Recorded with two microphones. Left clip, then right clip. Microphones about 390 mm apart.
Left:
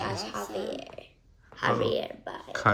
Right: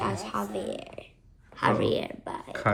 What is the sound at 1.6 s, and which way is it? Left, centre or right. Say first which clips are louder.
Speech: right 1 dB; centre.